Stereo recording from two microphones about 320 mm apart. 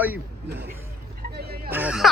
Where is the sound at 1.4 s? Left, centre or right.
Right.